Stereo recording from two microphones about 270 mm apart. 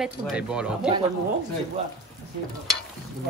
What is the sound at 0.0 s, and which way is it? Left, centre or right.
Speech, centre.